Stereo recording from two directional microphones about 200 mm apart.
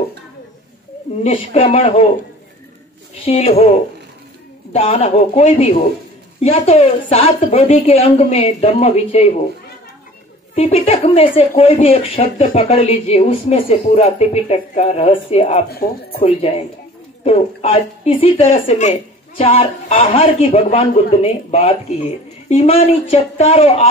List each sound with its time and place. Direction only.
1.2 s speech: 30° left (ahead or behind)
3.3 s speech: 30° left (ahead or behind)
10.5 s a woman's voice: 30° left (ahead or behind)
15.8 s speech: 50° left (ahead or behind)
16.2 s a woman's voice: 30° left (ahead or behind)